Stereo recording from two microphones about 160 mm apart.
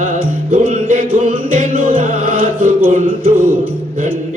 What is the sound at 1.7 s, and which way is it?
Music, 60° right (ahead or behind).